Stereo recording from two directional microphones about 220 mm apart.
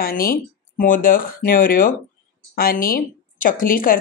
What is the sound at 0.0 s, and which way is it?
Speech, 40° left (ahead or behind).